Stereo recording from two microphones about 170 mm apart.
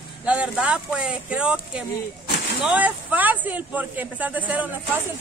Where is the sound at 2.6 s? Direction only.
10° right (ahead or behind).